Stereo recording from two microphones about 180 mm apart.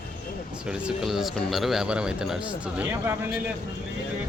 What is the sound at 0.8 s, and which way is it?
Speech, centre (ahead or behind).